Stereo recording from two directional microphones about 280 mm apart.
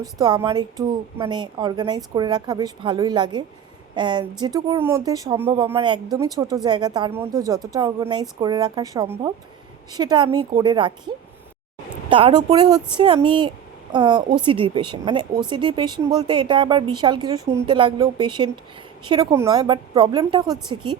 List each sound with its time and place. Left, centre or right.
0.0 s speech: centre
12.0 s speech: centre